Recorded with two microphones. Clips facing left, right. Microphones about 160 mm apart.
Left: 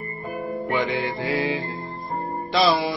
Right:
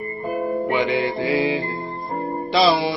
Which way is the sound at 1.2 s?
5° right (ahead or behind).